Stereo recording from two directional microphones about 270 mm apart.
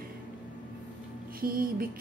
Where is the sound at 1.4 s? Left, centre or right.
Right.